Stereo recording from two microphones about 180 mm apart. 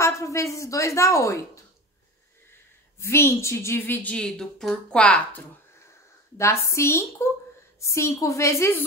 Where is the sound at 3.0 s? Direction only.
15° left (ahead or behind).